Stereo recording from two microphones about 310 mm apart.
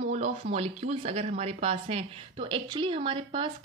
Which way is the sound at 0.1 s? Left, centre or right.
Right.